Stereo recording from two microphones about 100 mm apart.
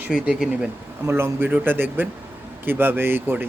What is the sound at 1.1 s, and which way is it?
Speech, 25° right (ahead or behind).